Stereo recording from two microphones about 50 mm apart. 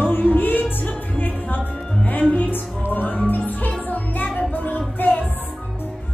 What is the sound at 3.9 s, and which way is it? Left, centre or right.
Music, left.